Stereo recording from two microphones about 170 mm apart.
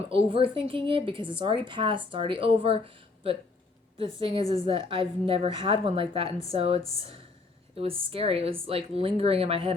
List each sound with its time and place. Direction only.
0.3 s a woman's voice: 30° right (ahead or behind)